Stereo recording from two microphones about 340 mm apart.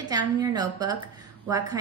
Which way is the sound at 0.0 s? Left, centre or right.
Centre.